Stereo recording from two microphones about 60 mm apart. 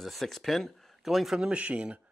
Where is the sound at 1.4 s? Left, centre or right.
Right.